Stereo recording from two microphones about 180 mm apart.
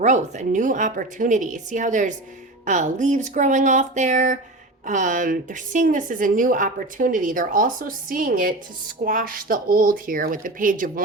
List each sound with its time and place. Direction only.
0.0 s a woman's voice: 40° right (ahead or behind)